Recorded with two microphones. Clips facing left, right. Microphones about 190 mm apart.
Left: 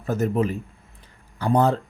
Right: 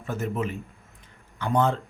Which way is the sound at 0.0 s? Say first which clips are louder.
Left 6 dB; 40° left (ahead or behind).